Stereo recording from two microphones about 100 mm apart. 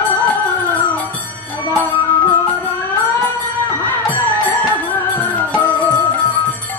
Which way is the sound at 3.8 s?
15° left (ahead or behind).